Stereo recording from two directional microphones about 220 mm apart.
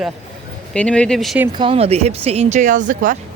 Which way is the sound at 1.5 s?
25° right (ahead or behind).